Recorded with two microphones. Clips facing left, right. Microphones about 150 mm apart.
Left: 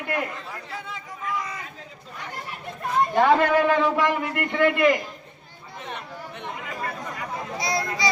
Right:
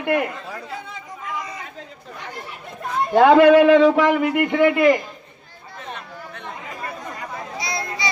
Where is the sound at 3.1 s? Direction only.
90° right; by 4.6 s 55° right (ahead or behind).